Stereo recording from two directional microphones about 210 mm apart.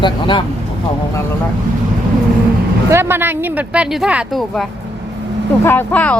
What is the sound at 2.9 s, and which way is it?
Speech, 10° right (ahead or behind).